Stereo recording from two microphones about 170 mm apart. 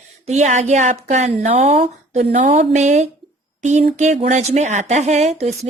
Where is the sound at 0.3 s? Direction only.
45° right (ahead or behind).